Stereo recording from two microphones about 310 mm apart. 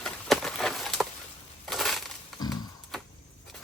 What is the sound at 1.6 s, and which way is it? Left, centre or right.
Crushing, centre.